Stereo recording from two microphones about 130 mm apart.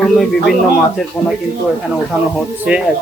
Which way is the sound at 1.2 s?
15° left (ahead or behind).